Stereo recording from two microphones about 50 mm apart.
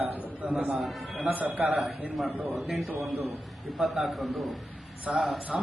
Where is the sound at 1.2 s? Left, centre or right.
Right.